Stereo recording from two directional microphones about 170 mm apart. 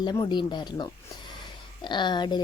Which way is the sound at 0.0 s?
25° left (ahead or behind).